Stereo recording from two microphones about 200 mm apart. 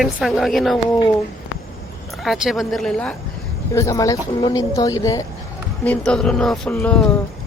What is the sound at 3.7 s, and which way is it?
Speech, 15° left (ahead or behind).